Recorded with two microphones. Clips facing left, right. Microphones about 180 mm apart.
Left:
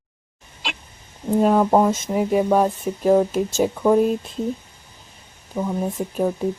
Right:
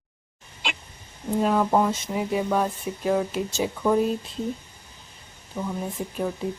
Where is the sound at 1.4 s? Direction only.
45° left (ahead or behind).